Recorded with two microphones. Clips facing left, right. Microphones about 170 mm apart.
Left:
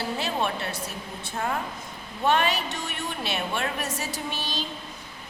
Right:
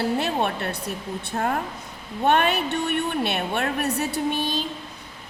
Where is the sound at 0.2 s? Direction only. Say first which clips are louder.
Right 3 dB; 55° right (ahead or behind).